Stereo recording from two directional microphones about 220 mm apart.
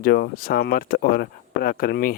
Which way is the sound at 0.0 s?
45° left (ahead or behind).